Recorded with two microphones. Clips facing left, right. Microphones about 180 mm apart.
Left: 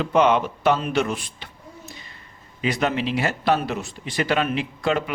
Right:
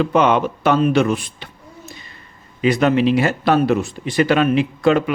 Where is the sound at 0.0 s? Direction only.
60° right (ahead or behind).